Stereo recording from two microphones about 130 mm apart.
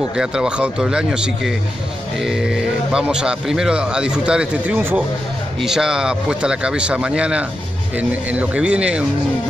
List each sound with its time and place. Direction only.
0.1 s speech: 5° right (ahead or behind)